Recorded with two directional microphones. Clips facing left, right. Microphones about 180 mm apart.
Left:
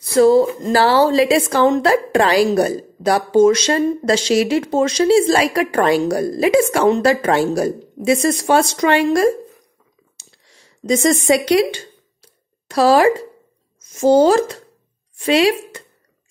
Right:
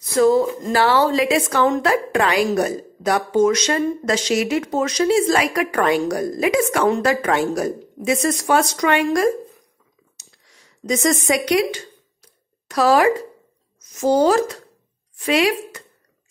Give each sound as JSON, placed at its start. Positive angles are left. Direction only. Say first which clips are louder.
{"t": 0.1, "sound": "a woman's voice", "louder": "left 4 dB", "side_deg": 30}
{"t": 10.1, "sound": "clicking", "louder": "left 3 dB", "side_deg": 30}
{"t": 10.9, "sound": "a woman's voice", "louder": "left 4 dB", "side_deg": 30}